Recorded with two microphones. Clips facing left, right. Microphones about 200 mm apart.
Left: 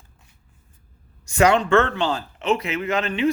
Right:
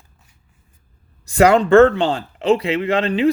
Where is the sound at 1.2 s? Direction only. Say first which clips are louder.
Right 5 dB; 35° right (ahead or behind).